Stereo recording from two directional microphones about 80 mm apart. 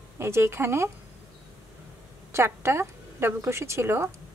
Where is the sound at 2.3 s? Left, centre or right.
Right.